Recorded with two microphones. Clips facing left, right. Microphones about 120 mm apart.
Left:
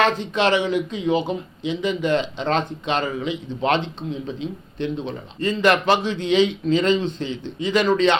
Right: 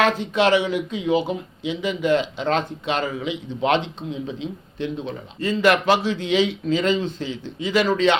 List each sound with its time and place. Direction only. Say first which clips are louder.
0.0 s speech: right 1 dB; 10° right (ahead or behind)